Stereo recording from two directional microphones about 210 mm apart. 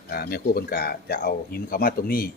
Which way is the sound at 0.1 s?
45° left (ahead or behind).